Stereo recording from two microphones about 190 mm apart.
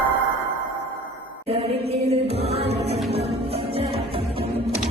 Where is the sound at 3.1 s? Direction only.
30° right (ahead or behind).